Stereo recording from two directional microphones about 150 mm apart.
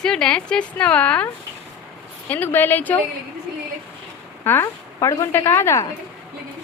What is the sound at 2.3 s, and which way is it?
Speech, 15° left (ahead or behind).